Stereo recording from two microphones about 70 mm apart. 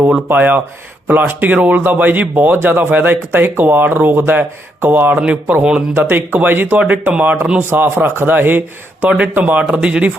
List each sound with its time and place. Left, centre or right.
0.0 s a man's voice: right
5.9 s a man's voice: right
7.7 s a man's voice: right